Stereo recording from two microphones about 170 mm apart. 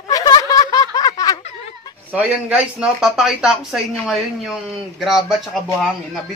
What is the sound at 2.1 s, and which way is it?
Speech, 10° right (ahead or behind).